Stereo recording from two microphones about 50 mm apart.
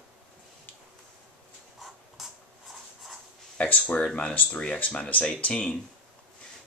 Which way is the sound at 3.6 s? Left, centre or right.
Left.